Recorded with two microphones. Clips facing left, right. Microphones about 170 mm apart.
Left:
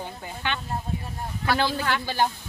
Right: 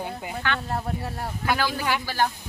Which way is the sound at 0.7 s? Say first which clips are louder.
Right 3 dB; 70° right (ahead or behind).